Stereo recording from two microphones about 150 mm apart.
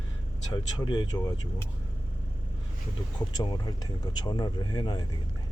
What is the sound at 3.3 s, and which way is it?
Speech, 25° left (ahead or behind).